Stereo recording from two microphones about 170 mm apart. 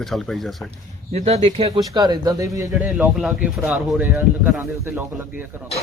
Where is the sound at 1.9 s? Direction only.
25° right (ahead or behind).